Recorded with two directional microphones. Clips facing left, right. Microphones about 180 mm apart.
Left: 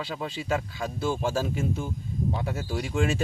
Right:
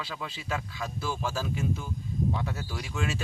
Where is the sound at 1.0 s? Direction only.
30° left (ahead or behind).